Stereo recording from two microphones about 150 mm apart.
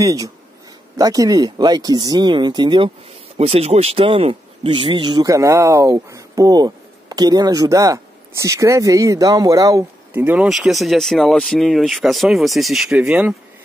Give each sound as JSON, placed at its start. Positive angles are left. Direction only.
{"t": 0.0, "sound": "speech", "side_deg": -20}
{"t": 3.3, "sound": "speech", "side_deg": -45}
{"t": 10.2, "sound": "speech", "side_deg": -10}